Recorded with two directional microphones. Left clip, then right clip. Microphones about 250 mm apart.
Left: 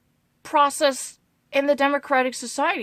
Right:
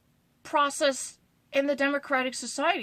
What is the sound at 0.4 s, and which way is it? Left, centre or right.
A woman's voice, left.